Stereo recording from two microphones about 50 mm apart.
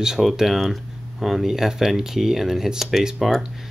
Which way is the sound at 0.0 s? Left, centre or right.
Centre.